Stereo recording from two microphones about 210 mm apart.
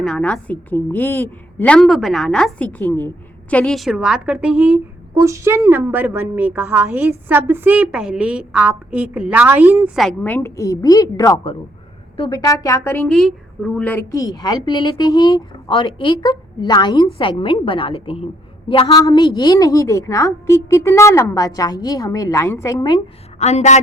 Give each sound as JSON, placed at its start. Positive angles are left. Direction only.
{"t": 0.0, "sound": "a woman's voice", "side_deg": 5}
{"t": 23.4, "sound": "a woman's voice", "side_deg": 30}